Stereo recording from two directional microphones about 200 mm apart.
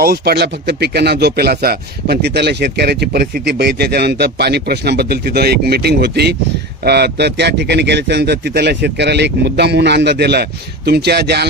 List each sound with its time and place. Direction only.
0.0 s a man's voice: 50° right (ahead or behind)